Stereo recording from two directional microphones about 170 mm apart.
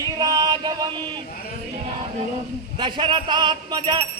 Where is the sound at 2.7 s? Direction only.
30° right (ahead or behind).